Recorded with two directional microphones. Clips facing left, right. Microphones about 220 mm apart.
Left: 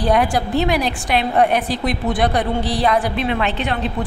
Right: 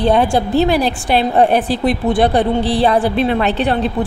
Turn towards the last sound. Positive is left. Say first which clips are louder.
# right 5 dB
turn(degrees=-35)  # may be behind; listen again after turning